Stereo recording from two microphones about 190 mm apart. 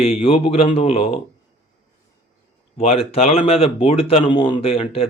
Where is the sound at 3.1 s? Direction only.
30° left (ahead or behind).